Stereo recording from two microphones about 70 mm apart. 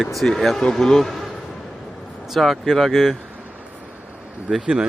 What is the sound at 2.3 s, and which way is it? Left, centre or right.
Speech, centre.